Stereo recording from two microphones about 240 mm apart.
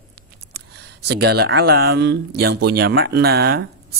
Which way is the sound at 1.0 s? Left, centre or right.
Right.